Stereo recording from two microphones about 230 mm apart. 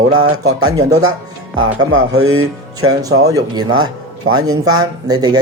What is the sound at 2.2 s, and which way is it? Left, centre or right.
Speech, right.